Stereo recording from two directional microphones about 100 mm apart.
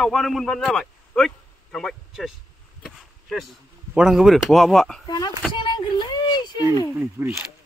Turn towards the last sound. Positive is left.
turn(degrees=-25)  # may be behind; listen again after turning